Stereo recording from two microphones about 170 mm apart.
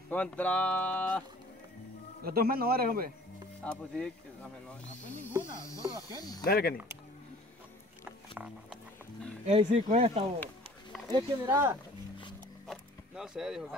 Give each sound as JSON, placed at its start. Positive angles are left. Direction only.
{"t": 0.1, "sound": "speech", "side_deg": 10}
{"t": 2.2, "sound": "a man's voice", "side_deg": -60}
{"t": 3.6, "sound": "speech", "side_deg": 5}
{"t": 6.4, "sound": "speech", "side_deg": 65}
{"t": 8.4, "sound": "speech", "side_deg": -10}
{"t": 9.5, "sound": "speech", "side_deg": -45}
{"t": 11.1, "sound": "speech", "side_deg": -20}
{"t": 12.6, "sound": "a sound", "side_deg": -5}